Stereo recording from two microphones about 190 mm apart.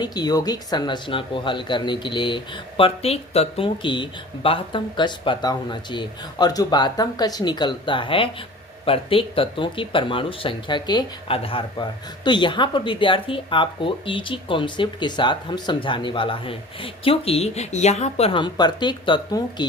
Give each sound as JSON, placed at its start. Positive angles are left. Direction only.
{"t": 0.0, "sound": "speech", "side_deg": 20}